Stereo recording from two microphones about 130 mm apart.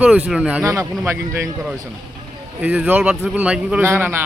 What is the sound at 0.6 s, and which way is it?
Speech, 20° right (ahead or behind).